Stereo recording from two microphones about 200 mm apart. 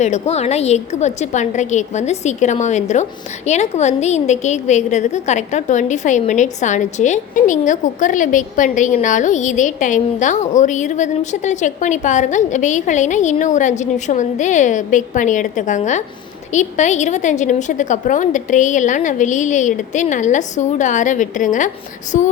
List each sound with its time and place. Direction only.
0.0 s a woman's voice: 35° left (ahead or behind)